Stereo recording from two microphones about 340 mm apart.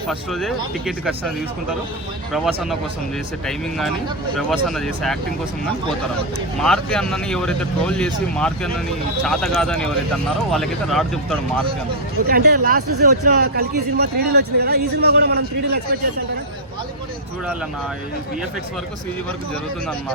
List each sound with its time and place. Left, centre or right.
0.1 s speech: centre
2.3 s speech: centre
6.6 s speech: centre
12.3 s speech: right